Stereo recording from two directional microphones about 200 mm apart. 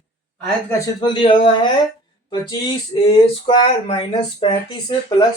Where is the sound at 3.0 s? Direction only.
25° left (ahead or behind).